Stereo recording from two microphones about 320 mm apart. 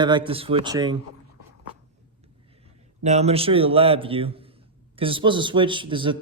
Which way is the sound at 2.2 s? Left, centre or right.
Centre.